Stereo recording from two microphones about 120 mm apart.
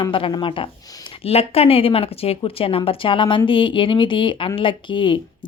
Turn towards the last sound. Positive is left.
turn(degrees=45)  # may be behind; listen again after turning